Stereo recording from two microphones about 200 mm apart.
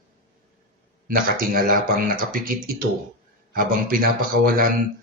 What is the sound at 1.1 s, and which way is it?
Speech, 45° right (ahead or behind).